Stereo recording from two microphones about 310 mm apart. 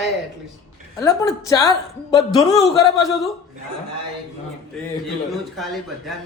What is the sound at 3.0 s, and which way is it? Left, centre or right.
Speech, centre.